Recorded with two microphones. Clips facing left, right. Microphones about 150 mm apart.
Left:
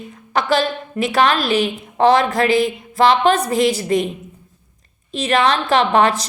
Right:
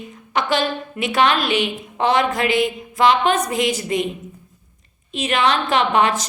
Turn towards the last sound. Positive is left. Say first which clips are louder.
# left 3 dB
turn(degrees=35)  # may be behind; listen again after turning